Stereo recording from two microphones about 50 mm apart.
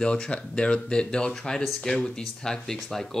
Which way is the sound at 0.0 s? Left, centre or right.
Centre.